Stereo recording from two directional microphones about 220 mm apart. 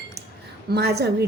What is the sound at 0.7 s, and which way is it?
Music, 45° right (ahead or behind).